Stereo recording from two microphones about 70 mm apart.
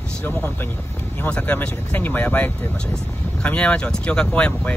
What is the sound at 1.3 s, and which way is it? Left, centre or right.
Speech, centre.